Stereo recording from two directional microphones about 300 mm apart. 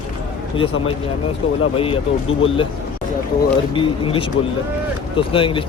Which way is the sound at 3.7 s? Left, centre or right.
Centre.